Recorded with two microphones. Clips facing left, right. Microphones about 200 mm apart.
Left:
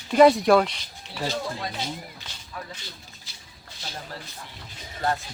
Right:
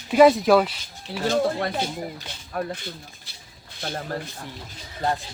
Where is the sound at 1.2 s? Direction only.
55° right (ahead or behind).